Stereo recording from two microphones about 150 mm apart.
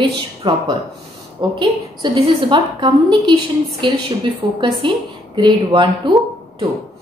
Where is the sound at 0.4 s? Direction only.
30° right (ahead or behind).